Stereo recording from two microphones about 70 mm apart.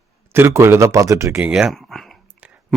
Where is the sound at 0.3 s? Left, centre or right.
Right.